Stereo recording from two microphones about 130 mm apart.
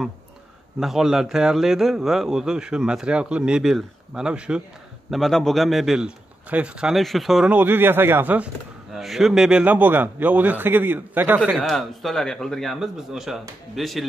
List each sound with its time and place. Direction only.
0.7 s a man's voice: 5° right (ahead or behind)
7.5 s a man's voice: 15° right (ahead or behind)
8.9 s a man's voice: centre (ahead or behind)
11.5 s a man's voice: centre (ahead or behind)